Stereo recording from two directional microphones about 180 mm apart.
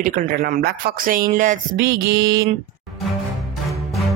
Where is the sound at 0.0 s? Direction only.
50° right (ahead or behind).